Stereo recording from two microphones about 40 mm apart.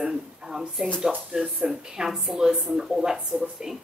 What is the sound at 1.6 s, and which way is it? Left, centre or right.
Speech, centre.